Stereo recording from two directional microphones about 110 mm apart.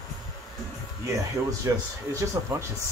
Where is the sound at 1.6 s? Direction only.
25° right (ahead or behind).